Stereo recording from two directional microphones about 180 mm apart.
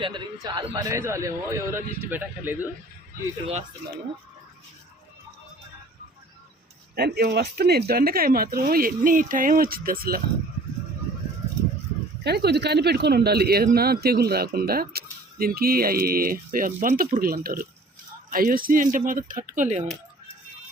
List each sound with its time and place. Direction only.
0.0 s a man's voice: 25° right (ahead or behind); by 2.6 s 10° right (ahead or behind)
3.4 s speech: 40° right (ahead or behind)
6.9 s speech: 60° right (ahead or behind)
12.2 s speech: 65° right (ahead or behind); by 19.8 s 40° right (ahead or behind)